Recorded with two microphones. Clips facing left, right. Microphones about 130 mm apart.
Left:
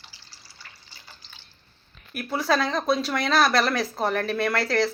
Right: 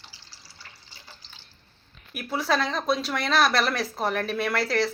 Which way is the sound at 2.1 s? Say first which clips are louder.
Left 2 dB; 5° right (ahead or behind).